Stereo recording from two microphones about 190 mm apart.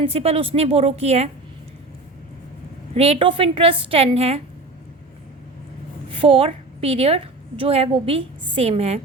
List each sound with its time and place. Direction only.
0.0 s a woman's voice: 30° right (ahead or behind)
2.9 s a woman's voice: 30° right (ahead or behind)
6.1 s a woman's voice: 30° right (ahead or behind)